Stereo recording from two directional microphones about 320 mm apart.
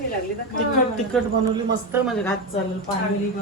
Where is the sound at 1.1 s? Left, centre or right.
Centre.